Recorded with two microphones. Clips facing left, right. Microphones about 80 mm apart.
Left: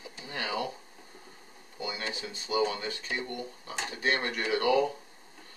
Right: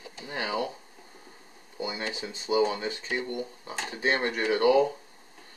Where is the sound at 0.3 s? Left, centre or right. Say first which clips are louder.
Right 3 dB; right.